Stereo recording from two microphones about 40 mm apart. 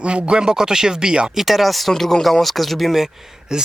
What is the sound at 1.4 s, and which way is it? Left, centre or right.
Speech, centre.